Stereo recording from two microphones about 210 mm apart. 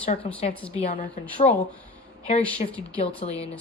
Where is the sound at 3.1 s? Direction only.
30° left (ahead or behind).